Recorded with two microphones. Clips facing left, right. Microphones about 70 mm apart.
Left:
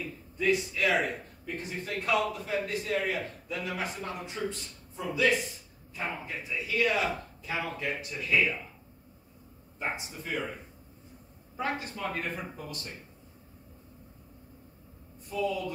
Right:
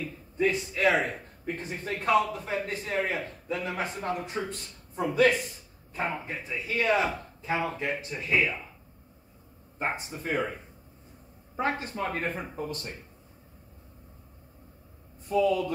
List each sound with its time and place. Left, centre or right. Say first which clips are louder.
0.4 s a man's voice: right 2 dB; right
4.3 s a man's voice: right 1 dB; right
9.8 s a man's voice: right 3 dB; right
11.5 s a man's voice: right 4 dB; right
15.2 s speech: right 7 dB; right